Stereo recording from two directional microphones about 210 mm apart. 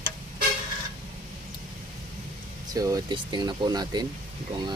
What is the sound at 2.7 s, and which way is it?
Speech, 15° right (ahead or behind).